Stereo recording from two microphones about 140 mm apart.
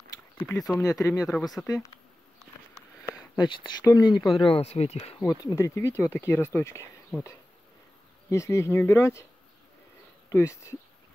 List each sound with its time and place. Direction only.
0.1 s a sound: 25° left (ahead or behind)
0.7 s speech: 20° left (ahead or behind)
3.3 s speech: 35° left (ahead or behind)
4.4 s speech: 45° left (ahead or behind)
5.2 s speech: 25° left (ahead or behind)
8.3 s speech: 20° left (ahead or behind)
10.3 s speech: 20° left (ahead or behind)